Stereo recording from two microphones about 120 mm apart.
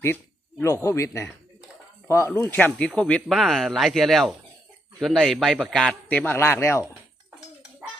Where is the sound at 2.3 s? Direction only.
10° left (ahead or behind).